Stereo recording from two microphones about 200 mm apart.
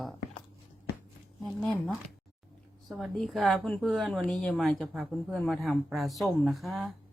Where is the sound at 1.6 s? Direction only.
5° left (ahead or behind).